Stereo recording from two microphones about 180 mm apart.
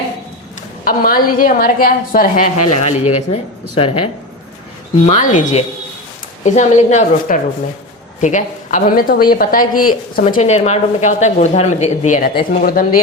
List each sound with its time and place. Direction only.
0.9 s speech: 50° left (ahead or behind); by 4.1 s 30° left (ahead or behind)
5.0 s a woman's voice: 45° left (ahead or behind)